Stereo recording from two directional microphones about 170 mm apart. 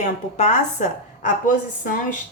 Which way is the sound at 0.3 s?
45° left (ahead or behind).